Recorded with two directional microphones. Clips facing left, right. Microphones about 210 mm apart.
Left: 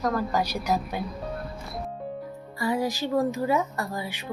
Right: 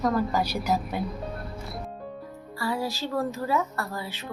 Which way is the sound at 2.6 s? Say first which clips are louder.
Left 3 dB; 15° left (ahead or behind).